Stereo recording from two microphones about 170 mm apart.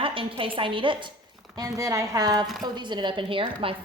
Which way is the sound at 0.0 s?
30° right (ahead or behind).